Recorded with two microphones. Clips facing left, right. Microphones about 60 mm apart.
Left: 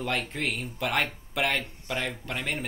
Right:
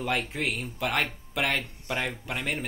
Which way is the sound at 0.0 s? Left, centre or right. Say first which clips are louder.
Right 1 dB; centre.